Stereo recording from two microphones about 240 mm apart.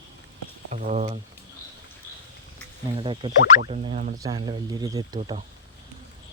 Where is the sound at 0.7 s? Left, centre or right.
Right.